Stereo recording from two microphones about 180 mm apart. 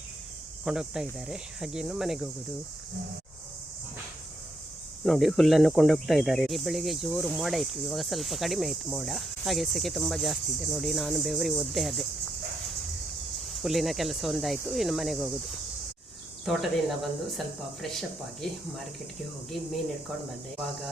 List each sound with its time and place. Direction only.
0.6 s speech: 5° right (ahead or behind)
5.0 s speech: centre (ahead or behind)
13.6 s speech: centre (ahead or behind)
16.5 s speech: centre (ahead or behind)